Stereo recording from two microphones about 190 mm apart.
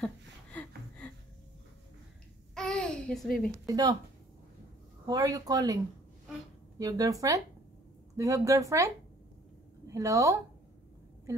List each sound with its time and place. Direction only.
0.0 s a sound: 5° left (ahead or behind)
2.5 s babbling: 5° left (ahead or behind)
3.6 s speech: 20° right (ahead or behind)
5.0 s speech: 20° right (ahead or behind)
6.8 s a woman's voice: 20° right (ahead or behind)